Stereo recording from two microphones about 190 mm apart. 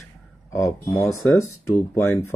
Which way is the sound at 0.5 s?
15° left (ahead or behind).